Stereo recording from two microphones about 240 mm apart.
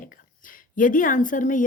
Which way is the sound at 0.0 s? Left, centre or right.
Left.